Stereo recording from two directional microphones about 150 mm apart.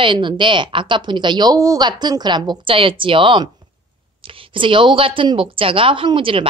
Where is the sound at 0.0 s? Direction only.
30° right (ahead or behind).